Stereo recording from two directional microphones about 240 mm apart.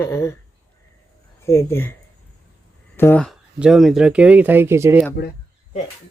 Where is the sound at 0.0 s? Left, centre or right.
Centre.